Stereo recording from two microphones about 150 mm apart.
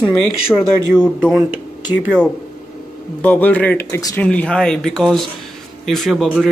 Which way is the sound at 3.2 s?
10° left (ahead or behind).